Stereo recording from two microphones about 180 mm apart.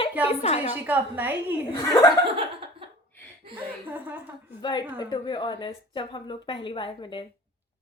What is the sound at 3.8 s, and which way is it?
Speech, 10° right (ahead or behind).